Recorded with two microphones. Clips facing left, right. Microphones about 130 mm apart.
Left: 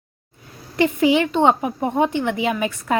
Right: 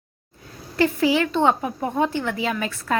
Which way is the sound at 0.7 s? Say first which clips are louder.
Left 3 dB; 20° left (ahead or behind).